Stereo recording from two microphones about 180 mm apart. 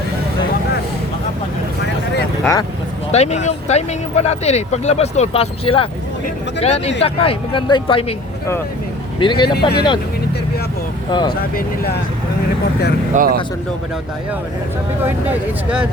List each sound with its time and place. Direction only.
2.4 s speech: 15° left (ahead or behind)
3.1 s speech: 35° left (ahead or behind)
9.1 s speech: 25° left (ahead or behind)
9.6 s speech: 65° left (ahead or behind)
11.3 s speech: 60° left (ahead or behind)
13.1 s speech: 55° right (ahead or behind)